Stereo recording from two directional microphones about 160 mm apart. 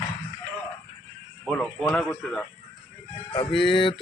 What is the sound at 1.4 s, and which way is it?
A man's voice, 5° left (ahead or behind).